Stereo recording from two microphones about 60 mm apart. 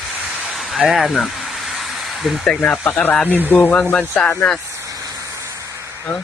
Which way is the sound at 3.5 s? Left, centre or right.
Centre.